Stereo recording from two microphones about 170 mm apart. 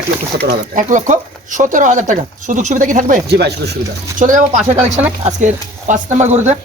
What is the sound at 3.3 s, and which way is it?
Speech, 75° right (ahead or behind).